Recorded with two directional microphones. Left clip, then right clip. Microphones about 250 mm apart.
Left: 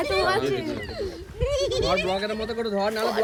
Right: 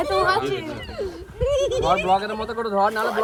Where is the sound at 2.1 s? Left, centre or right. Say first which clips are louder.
Right 6 dB; centre.